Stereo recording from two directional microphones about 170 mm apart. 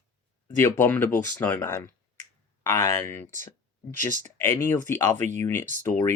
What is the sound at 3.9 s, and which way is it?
Speech, 45° right (ahead or behind).